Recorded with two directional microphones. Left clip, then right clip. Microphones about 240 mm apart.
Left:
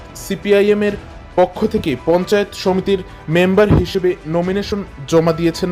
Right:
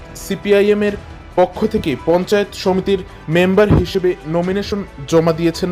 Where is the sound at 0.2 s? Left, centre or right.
Centre.